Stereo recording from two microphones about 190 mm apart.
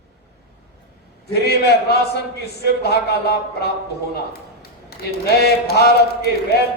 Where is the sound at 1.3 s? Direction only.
60° left (ahead or behind).